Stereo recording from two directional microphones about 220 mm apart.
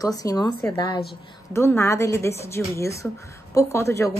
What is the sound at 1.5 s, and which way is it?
A woman's voice, 10° left (ahead or behind).